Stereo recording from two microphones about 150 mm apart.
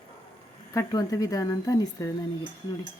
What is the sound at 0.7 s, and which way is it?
Speech, 25° left (ahead or behind).